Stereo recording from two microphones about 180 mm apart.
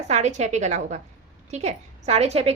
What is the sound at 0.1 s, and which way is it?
A woman's voice, 40° right (ahead or behind).